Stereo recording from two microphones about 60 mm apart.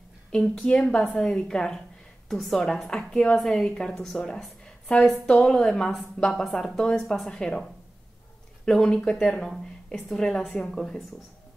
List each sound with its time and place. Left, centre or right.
0.3 s a woman's voice: centre
6.4 s a woman's voice: centre